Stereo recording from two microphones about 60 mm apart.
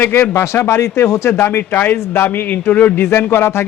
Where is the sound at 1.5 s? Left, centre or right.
Left.